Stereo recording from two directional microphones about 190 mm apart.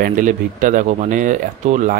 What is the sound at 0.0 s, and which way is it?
Speech, 40° right (ahead or behind).